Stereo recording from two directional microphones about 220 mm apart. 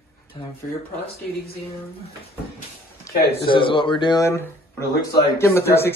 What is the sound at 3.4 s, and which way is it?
Speech, 25° left (ahead or behind).